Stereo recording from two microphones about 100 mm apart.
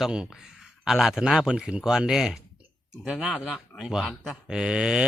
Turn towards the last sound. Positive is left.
turn(degrees=-10)  # may be behind; listen again after turning